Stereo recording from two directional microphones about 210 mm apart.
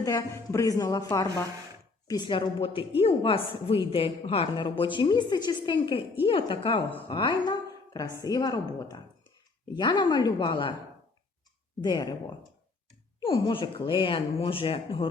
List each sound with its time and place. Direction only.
0.0 s a woman's voice: 15° left (ahead or behind)
11.8 s a woman's voice: 20° left (ahead or behind)
13.2 s a woman's voice: 25° left (ahead or behind)